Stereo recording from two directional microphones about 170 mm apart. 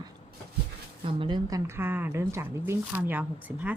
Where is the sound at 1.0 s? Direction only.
30° right (ahead or behind).